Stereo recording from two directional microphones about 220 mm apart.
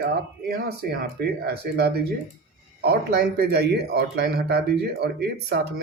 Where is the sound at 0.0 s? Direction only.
45° right (ahead or behind).